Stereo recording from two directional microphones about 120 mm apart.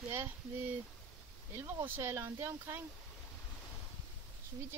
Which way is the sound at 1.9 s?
20° right (ahead or behind).